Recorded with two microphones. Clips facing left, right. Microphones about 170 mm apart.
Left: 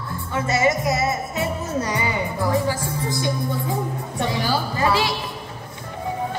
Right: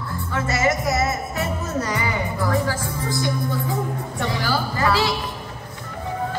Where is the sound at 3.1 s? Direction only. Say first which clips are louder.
Right 1 dB; 20° left (ahead or behind).